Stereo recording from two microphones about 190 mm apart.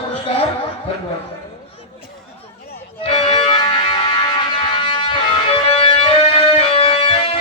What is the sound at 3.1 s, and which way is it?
Music, 25° left (ahead or behind).